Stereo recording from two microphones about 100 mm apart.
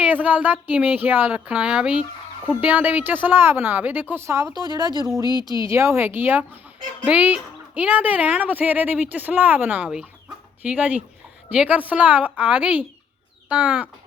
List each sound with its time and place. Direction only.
0.0 s a woman's voice: 15° right (ahead or behind)
5.2 s speech: 45° left (ahead or behind)
5.6 s a woman's voice: 25° right (ahead or behind)